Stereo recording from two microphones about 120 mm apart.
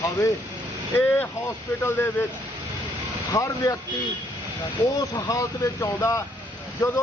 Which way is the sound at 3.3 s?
25° left (ahead or behind).